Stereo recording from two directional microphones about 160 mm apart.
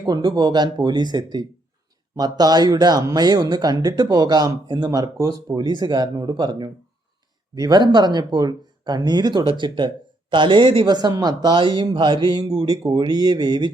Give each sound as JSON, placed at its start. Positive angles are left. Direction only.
{"t": 0.0, "sound": "speech", "side_deg": -25}